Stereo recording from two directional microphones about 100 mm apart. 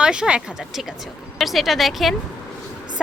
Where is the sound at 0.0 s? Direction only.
10° right (ahead or behind).